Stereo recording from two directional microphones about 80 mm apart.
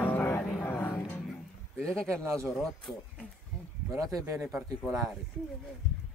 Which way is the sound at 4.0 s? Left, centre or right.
Right.